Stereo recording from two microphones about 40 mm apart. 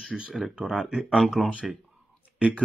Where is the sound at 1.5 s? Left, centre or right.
Right.